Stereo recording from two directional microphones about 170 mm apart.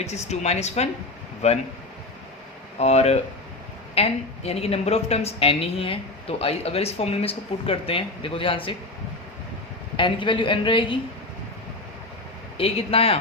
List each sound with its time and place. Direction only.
0.0 s a woman's voice: 40° left (ahead or behind)
2.7 s a woman's voice: 40° left (ahead or behind)
10.0 s a woman's voice: 30° left (ahead or behind)
12.5 s a woman's voice: 35° left (ahead or behind)